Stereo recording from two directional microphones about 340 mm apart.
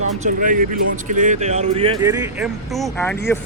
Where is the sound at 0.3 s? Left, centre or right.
Right.